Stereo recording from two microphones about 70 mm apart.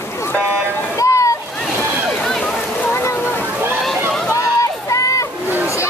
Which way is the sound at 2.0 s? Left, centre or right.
Centre.